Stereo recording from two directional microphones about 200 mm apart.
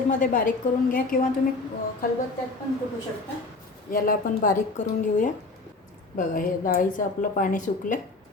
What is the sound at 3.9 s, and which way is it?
A woman's voice, 45° left (ahead or behind).